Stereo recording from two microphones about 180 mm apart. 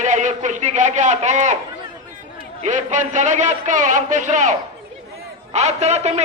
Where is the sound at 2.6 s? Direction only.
40° right (ahead or behind).